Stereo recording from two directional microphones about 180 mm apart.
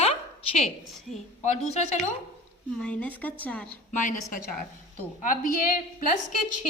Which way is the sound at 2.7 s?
5° left (ahead or behind).